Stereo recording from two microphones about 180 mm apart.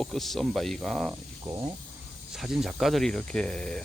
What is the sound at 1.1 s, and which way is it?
Speech, 20° right (ahead or behind).